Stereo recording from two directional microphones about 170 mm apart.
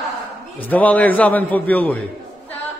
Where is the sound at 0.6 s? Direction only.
10° left (ahead or behind).